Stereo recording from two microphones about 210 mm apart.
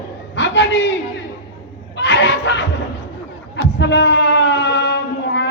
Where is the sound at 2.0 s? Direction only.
55° left (ahead or behind).